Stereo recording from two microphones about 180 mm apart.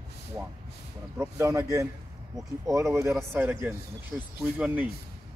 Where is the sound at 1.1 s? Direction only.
15° right (ahead or behind).